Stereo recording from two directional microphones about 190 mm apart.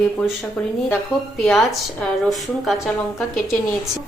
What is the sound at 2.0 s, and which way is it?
A woman's voice, centre (ahead or behind).